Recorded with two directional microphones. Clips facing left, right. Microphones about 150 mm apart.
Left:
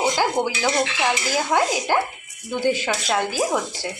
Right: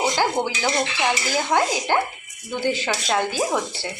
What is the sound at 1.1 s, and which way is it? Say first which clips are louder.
Stir: right 1 dB; 10° left (ahead or behind).